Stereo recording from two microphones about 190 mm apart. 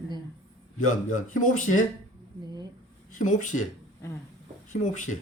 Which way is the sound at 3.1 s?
40° left (ahead or behind).